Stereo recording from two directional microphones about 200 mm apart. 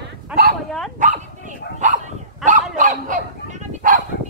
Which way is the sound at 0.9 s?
40° right (ahead or behind).